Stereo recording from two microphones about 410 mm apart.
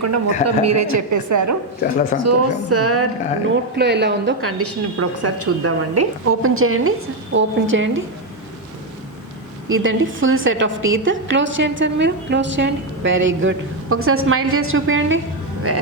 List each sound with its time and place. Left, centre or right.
0.4 s a woman's voice: right
9.6 s a woman's voice: right